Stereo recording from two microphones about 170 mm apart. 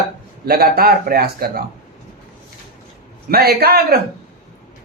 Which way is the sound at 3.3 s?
65° right (ahead or behind).